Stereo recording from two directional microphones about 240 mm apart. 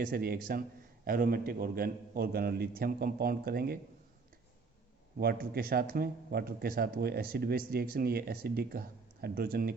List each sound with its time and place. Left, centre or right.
0.0 s speech: right
5.2 s speech: right